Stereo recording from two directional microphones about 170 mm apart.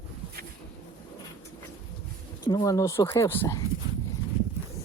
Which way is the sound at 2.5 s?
20° left (ahead or behind).